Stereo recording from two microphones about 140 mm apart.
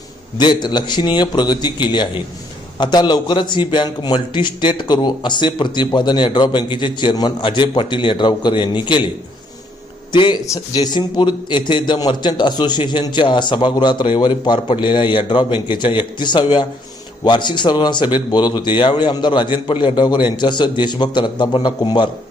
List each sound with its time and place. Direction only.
0.3 s a man's voice: 30° left (ahead or behind)
10.1 s a man's voice: 35° left (ahead or behind)